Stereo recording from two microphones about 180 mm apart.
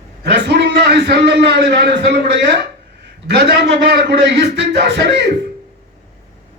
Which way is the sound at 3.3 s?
70° right (ahead or behind).